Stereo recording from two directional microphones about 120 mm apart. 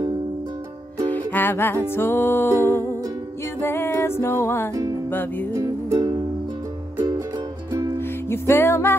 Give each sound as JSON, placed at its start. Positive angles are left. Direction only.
{"t": 1.0, "sound": "music", "side_deg": 15}
{"t": 5.5, "sound": "music", "side_deg": -25}
{"t": 8.3, "sound": "music", "side_deg": 20}